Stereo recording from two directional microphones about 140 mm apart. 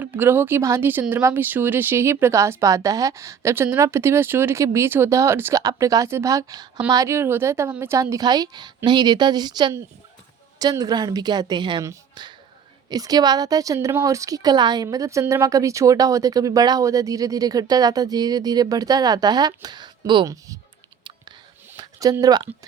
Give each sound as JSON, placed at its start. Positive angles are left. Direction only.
{"t": 0.0, "sound": "a woman's voice", "side_deg": -15}
{"t": 21.8, "sound": "speech", "side_deg": -25}